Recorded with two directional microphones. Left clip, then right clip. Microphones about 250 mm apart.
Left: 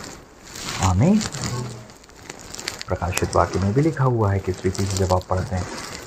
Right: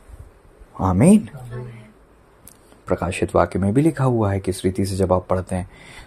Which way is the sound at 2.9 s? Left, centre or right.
Right.